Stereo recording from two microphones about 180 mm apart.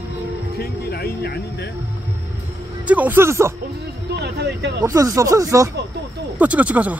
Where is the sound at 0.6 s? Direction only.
60° left (ahead or behind).